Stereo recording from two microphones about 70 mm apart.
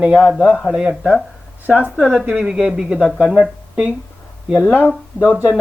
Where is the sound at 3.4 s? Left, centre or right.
Centre.